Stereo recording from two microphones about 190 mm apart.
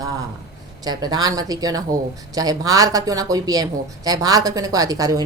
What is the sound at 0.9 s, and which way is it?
Speech, 20° right (ahead or behind).